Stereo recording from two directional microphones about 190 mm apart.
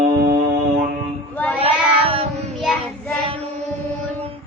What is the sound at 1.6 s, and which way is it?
Child singing, 30° right (ahead or behind).